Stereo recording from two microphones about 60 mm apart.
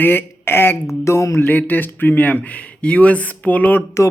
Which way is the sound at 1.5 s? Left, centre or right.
Left.